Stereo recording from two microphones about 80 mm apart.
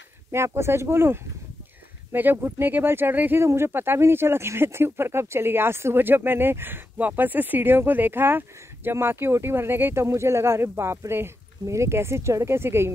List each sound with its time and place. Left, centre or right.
0.3 s speech: right